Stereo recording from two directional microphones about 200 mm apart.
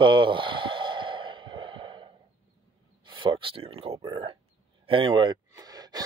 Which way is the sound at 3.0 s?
25° right (ahead or behind).